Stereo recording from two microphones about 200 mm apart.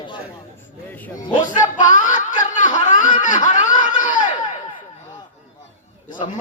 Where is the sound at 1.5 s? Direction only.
40° left (ahead or behind).